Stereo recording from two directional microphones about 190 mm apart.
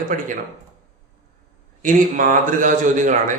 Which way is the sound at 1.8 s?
45° right (ahead or behind).